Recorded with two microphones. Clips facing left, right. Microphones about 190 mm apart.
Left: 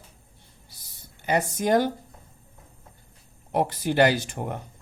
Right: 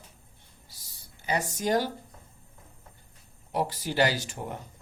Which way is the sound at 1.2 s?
55° left (ahead or behind).